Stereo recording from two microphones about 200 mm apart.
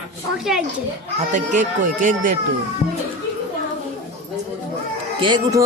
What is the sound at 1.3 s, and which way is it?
Speech, 40° right (ahead or behind).